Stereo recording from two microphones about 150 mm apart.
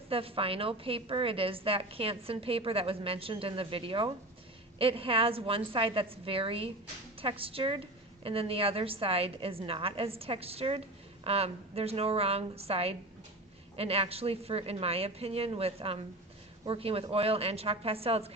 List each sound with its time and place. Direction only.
0.1 s a woman's voice: 40° right (ahead or behind)